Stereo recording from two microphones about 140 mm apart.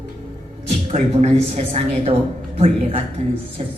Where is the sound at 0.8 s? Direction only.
50° right (ahead or behind).